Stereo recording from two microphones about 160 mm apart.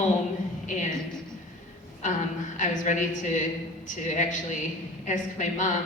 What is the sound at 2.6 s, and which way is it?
Speech, 50° left (ahead or behind).